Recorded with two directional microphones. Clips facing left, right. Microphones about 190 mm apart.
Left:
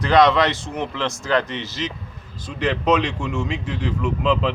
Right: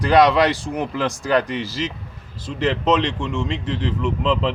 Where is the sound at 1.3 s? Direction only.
10° right (ahead or behind).